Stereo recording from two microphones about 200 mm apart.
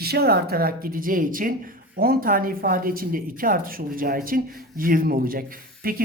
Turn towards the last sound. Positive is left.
turn(degrees=-45)  # may be behind; listen again after turning